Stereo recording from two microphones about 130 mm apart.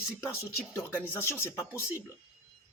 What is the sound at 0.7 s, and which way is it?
Speech, 20° left (ahead or behind).